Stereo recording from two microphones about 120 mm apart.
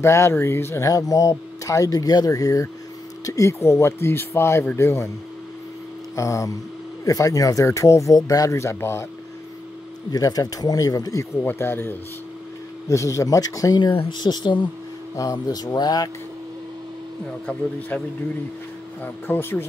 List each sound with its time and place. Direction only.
0.0 s speech: 20° left (ahead or behind)
6.1 s speech: 25° left (ahead or behind)
10.1 s speech: 30° left (ahead or behind)
11.4 s speech: 20° left (ahead or behind); by 16.1 s 35° left (ahead or behind)
17.5 s a man's voice: 10° left (ahead or behind)
19.0 s a man's voice: 15° left (ahead or behind)